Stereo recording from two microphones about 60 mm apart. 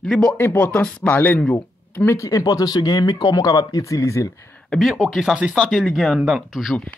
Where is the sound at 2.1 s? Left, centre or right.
Left.